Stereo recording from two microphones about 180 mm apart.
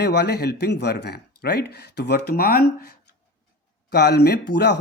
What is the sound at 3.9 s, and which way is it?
Speech, 65° left (ahead or behind).